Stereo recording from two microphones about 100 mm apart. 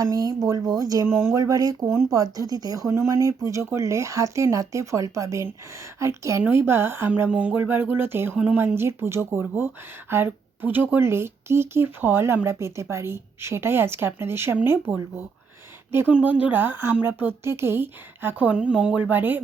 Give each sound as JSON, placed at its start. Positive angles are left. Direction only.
{"t": 0.0, "sound": "speech", "side_deg": -35}